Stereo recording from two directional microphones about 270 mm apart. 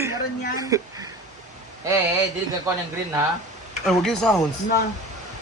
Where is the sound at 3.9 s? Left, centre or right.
Centre.